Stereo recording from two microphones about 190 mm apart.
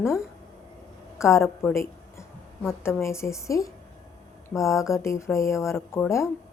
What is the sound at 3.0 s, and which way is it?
A woman's voice, 15° left (ahead or behind).